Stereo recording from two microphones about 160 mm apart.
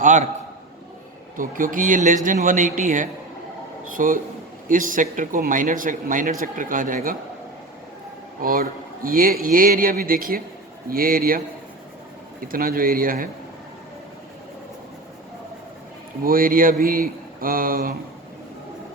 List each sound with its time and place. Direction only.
0.0 s a man's voice: 50° right (ahead or behind)
1.4 s speech: 60° right (ahead or behind)
8.4 s speech: 65° right (ahead or behind)
12.5 s speech: 65° right (ahead or behind)
16.2 s speech: 65° right (ahead or behind)